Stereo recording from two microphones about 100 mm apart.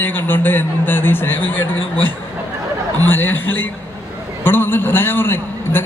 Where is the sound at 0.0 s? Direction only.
20° left (ahead or behind).